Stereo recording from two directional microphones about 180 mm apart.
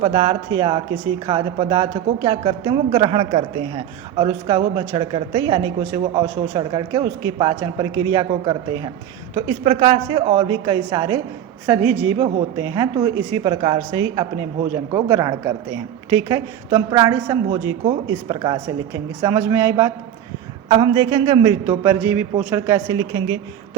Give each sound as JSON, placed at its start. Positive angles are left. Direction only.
{"t": 0.0, "sound": "speech", "side_deg": -30}
{"t": 11.6, "sound": "speech", "side_deg": -10}
{"t": 20.7, "sound": "speech", "side_deg": -25}
{"t": 21.7, "sound": "speech", "side_deg": -10}
{"t": 23.0, "sound": "speech", "side_deg": -25}